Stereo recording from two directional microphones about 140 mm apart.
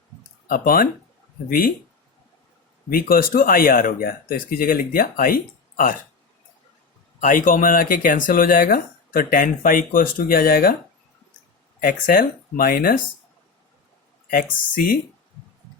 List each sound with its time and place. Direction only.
0.4 s speech: 90° left
2.9 s speech: 90° left
7.2 s speech: 75° left (ahead or behind); by 10.8 s 90° left
11.8 s speech: 90° left
14.3 s speech: 90° left